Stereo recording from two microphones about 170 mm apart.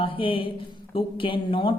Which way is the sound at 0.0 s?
30° left (ahead or behind).